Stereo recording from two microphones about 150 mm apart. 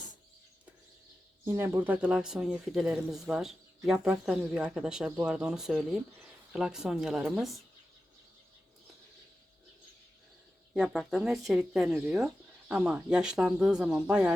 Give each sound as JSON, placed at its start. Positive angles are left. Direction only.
{"t": 1.5, "sound": "speech", "side_deg": -15}
{"t": 10.8, "sound": "speech", "side_deg": 0}